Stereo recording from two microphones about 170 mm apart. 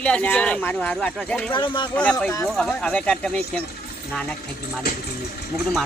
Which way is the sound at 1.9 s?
5° left (ahead or behind).